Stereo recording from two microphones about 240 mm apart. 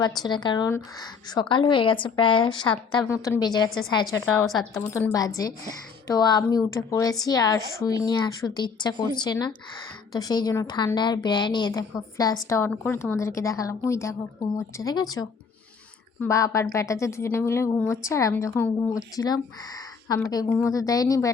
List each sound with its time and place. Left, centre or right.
0.2 s a woman's voice: centre
4.7 s a woman's voice: centre